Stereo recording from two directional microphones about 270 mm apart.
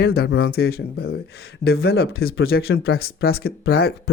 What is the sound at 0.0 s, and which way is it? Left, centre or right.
Speech, left.